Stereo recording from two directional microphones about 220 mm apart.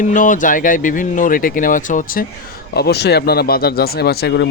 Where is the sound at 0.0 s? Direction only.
35° left (ahead or behind).